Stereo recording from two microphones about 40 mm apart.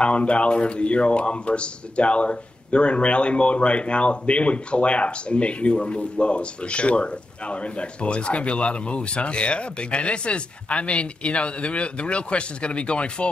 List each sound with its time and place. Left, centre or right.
0.0 s a man's voice: left